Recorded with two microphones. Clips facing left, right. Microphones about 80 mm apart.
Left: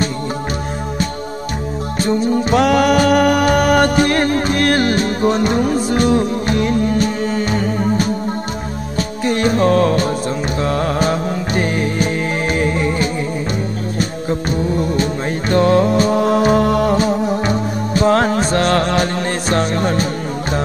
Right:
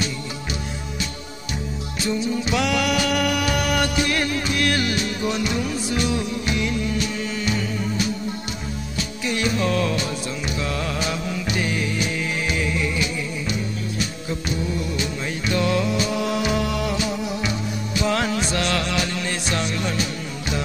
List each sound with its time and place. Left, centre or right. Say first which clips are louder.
2.0 s music: left 8 dB; left
14.5 s music: left 7 dB; left